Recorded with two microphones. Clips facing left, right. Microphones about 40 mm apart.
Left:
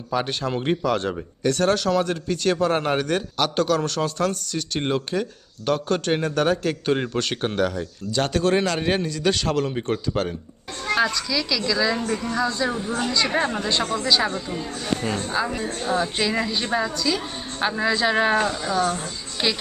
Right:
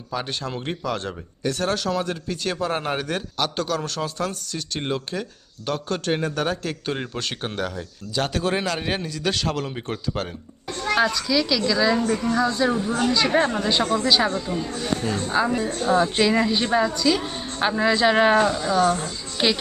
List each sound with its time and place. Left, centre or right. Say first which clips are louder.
0.1 s speech: left 4 dB; centre
15.0 s speech: even; centre
15.3 s a woman's voice: right 6 dB; centre
15.6 s a woman's voice: right 2 dB; centre
15.9 s speech: right 4 dB; centre